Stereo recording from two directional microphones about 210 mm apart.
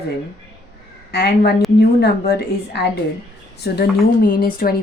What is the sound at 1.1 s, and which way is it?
A woman's voice, 50° left (ahead or behind).